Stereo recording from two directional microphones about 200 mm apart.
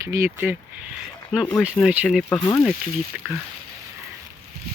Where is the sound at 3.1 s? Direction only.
5° right (ahead or behind).